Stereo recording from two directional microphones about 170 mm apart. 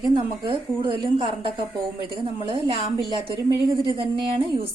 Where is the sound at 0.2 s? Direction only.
30° right (ahead or behind).